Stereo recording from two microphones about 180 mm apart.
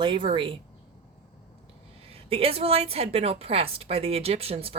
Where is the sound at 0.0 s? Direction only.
30° right (ahead or behind).